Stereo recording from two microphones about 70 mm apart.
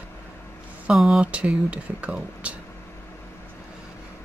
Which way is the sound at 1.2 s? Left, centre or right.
Centre.